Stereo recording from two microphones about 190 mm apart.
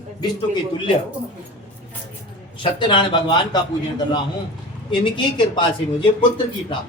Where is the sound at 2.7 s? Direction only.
25° left (ahead or behind).